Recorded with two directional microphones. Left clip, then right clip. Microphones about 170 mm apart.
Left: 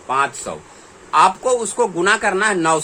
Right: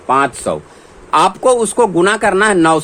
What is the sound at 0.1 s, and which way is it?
Speech, 60° right (ahead or behind).